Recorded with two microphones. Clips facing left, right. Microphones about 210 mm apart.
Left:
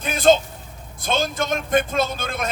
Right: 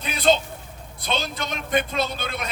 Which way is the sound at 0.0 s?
45° left (ahead or behind).